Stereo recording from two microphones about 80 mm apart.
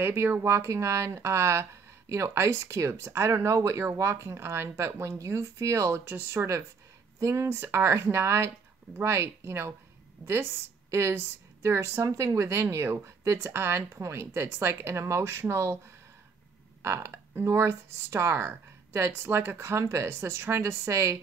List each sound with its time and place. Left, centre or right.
0.0 s speech: right
16.8 s speech: right